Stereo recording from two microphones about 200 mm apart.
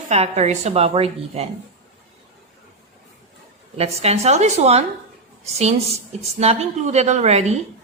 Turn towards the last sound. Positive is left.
turn(degrees=-35)  # may be behind; listen again after turning